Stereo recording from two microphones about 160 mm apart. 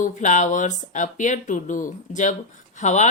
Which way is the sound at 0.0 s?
50° left (ahead or behind).